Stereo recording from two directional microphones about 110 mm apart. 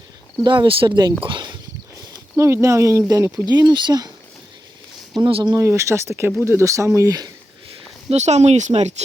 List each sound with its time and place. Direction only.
0.4 s speech: 45° right (ahead or behind)
2.3 s speech: 25° right (ahead or behind)
5.1 s speech: 45° right (ahead or behind)
5.5 s speech: 25° right (ahead or behind)
7.7 s speech: 90° right